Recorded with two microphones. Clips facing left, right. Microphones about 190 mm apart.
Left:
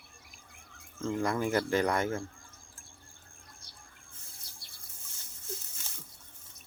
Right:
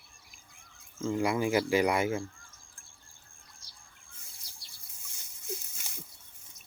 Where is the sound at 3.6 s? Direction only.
55° left (ahead or behind).